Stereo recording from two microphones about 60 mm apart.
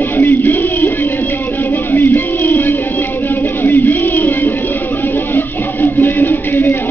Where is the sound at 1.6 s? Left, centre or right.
Left.